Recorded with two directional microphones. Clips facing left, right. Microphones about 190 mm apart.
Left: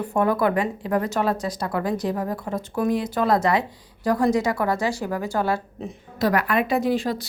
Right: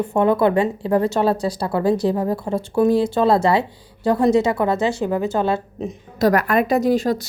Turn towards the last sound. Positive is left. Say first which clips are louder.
# right 5 dB
turn(degrees=-45)  # may be behind; listen again after turning